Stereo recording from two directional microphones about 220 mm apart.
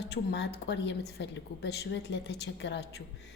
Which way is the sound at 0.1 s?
50° left (ahead or behind).